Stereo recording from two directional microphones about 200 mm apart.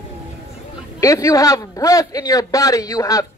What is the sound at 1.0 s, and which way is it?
A man's voice, 15° left (ahead or behind).